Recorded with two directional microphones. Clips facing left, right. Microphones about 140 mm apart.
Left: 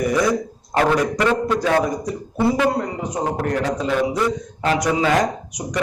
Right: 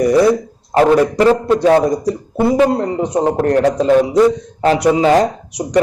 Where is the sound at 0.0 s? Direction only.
35° right (ahead or behind).